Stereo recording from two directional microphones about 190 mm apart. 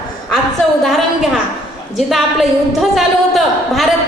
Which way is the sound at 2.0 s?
Centre (ahead or behind).